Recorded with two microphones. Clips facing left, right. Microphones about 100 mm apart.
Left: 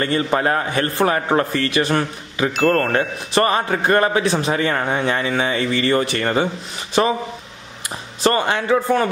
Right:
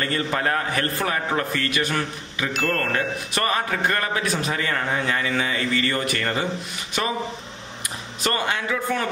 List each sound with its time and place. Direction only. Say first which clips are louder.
0.0 s a man's voice: left 5 dB; 25° left (ahead or behind)
8.2 s a man's voice: left 7 dB; 30° left (ahead or behind)